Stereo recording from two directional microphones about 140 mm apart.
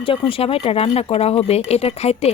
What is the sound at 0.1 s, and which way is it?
Speech, 40° left (ahead or behind).